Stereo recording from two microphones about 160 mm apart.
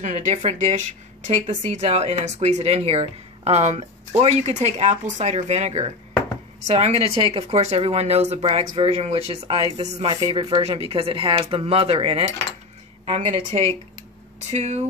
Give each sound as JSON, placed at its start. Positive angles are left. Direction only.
{"t": 0.0, "sound": "speech", "side_deg": -45}
{"t": 9.3, "sound": "speech", "side_deg": -25}
{"t": 9.8, "sound": "speech", "side_deg": -40}